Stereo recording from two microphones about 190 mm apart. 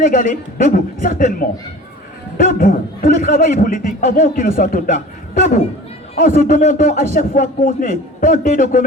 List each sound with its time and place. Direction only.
0.1 s a man's voice: 45° left (ahead or behind)
6.2 s a man's voice: 40° left (ahead or behind)